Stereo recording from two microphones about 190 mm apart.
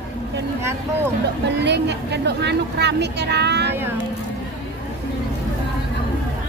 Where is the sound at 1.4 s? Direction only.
65° right (ahead or behind).